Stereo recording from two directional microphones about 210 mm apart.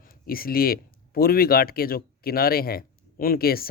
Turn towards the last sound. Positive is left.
turn(degrees=45)  # may be behind; listen again after turning